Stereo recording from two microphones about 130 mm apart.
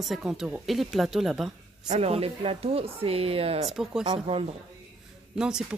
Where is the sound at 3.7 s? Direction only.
5° right (ahead or behind).